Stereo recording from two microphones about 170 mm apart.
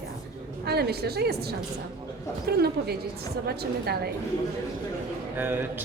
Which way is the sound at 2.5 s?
70° right (ahead or behind).